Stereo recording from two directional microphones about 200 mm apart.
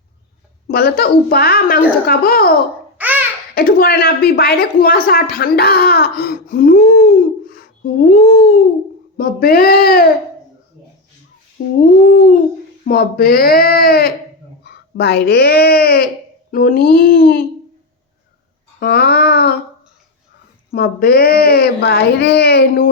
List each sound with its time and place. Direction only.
0.7 s a woman's voice: 50° left (ahead or behind)
3.0 s babbling: 10° right (ahead or behind)
3.5 s a woman's voice: 45° left (ahead or behind)
11.6 s humming: 50° left (ahead or behind)
12.0 s a woman's voice: 45° left (ahead or behind)
18.8 s a woman's voice: 50° left (ahead or behind)
20.7 s a woman's voice: 50° left (ahead or behind)